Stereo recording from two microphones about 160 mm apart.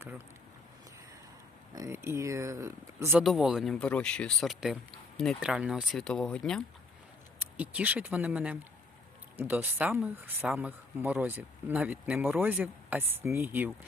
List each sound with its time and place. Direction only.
1.7 s speech: 20° right (ahead or behind)
3.1 s speech: centre (ahead or behind)
7.5 s speech: 10° right (ahead or behind)